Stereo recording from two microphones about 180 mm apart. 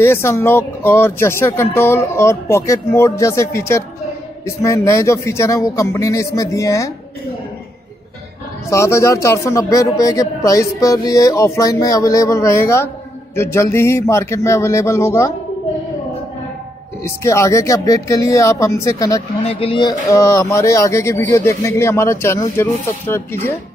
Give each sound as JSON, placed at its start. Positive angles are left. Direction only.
{"t": 0.0, "sound": "speech", "side_deg": 15}
{"t": 8.6, "sound": "speech", "side_deg": 15}
{"t": 17.0, "sound": "speech", "side_deg": 15}
{"t": 19.4, "sound": "speech", "side_deg": 30}